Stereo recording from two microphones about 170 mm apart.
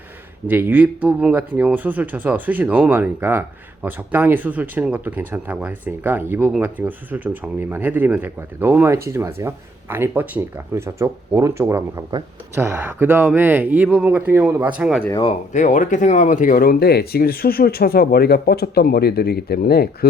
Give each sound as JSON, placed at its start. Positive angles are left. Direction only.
{"t": 0.4, "sound": "speech", "side_deg": -10}
{"t": 15.2, "sound": "speech", "side_deg": 40}